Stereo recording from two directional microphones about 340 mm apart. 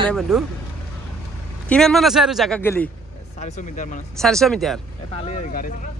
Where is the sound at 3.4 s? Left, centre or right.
Left.